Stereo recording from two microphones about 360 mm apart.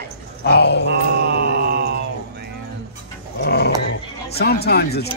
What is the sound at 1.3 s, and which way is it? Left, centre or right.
Mantra, right.